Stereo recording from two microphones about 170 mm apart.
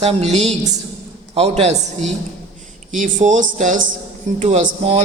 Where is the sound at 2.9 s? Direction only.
50° right (ahead or behind).